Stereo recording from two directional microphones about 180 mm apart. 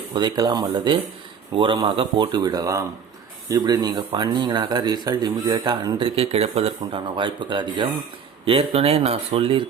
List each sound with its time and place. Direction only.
0.1 s speech: 25° right (ahead or behind)